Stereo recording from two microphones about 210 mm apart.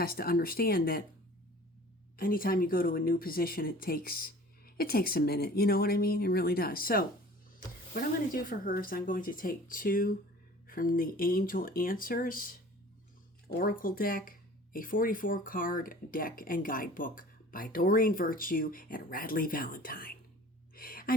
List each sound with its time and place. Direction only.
0.0 s speech: 45° left (ahead or behind)
2.1 s speech: 45° left (ahead or behind)
13.6 s speech: 40° left (ahead or behind)
20.7 s gasp: 45° left (ahead or behind)